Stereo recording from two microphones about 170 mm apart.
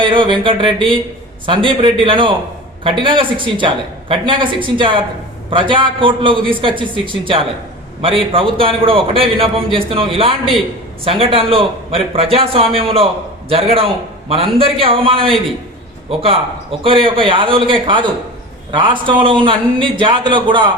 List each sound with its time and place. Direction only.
0.0 s a man's voice: 30° right (ahead or behind)